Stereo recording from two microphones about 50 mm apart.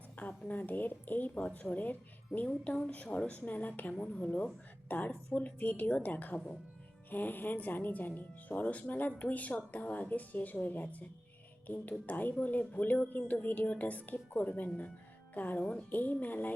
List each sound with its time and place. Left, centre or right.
0.2 s a woman's voice: left